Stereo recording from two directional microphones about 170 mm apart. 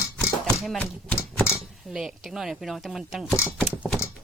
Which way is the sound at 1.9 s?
5° right (ahead or behind).